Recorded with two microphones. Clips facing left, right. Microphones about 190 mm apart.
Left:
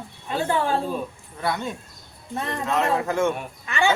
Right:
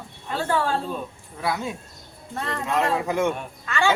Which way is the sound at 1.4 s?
5° right (ahead or behind).